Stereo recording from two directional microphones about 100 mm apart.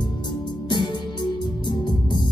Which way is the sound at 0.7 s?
50° left (ahead or behind).